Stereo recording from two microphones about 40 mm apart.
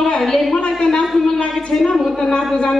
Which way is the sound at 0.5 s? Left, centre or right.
Left.